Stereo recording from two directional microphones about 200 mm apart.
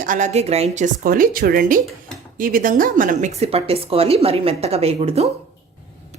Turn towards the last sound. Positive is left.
turn(degrees=-30)  # may be behind; listen again after turning